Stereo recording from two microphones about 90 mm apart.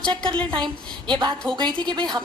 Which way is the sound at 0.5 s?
60° right (ahead or behind).